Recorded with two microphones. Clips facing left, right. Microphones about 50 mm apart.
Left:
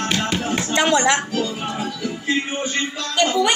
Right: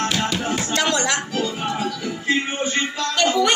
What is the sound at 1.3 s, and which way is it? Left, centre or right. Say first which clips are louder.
Music: even; centre.